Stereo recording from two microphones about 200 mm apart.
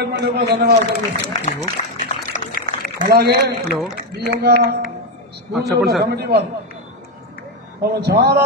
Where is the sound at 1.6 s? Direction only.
40° left (ahead or behind).